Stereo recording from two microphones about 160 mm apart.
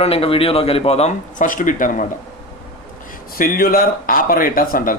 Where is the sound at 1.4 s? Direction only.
55° left (ahead or behind).